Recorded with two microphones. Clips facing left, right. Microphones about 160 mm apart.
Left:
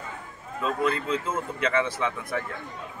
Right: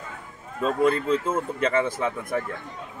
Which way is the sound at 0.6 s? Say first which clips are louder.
Right 5 dB; 45° right (ahead or behind).